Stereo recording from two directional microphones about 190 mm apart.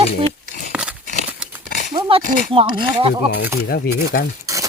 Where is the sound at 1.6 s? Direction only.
45° left (ahead or behind).